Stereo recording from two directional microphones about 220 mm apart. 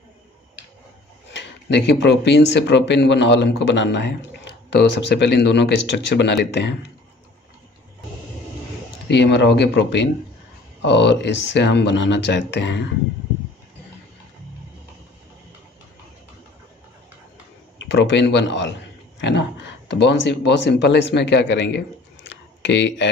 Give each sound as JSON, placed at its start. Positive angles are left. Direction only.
{"t": 1.3, "sound": "speech", "side_deg": 55}
{"t": 9.1, "sound": "speech", "side_deg": 50}
{"t": 17.7, "sound": "speech", "side_deg": 50}